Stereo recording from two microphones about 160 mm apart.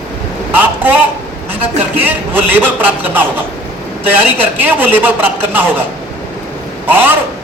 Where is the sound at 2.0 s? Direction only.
10° right (ahead or behind).